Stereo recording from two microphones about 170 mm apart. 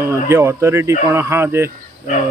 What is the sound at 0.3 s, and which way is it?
Speech, 15° right (ahead or behind).